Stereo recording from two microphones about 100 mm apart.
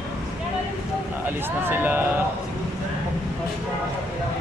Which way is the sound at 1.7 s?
20° right (ahead or behind).